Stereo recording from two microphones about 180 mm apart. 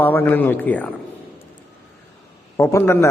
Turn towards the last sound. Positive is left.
turn(degrees=15)  # may be behind; listen again after turning